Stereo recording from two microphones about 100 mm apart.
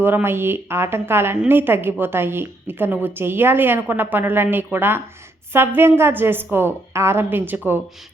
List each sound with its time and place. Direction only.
0.0 s a woman's voice: 20° right (ahead or behind)